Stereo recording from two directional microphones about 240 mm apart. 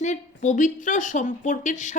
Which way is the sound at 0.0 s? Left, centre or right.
Left.